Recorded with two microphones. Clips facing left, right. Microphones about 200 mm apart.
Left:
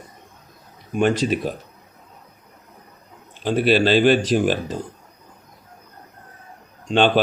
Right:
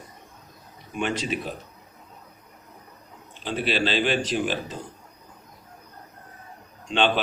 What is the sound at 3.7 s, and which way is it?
Speech, 45° left (ahead or behind).